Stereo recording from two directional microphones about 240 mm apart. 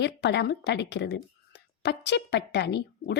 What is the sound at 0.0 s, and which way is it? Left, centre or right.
A woman's voice, left.